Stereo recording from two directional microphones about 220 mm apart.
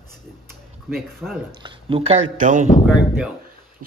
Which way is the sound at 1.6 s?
25° right (ahead or behind).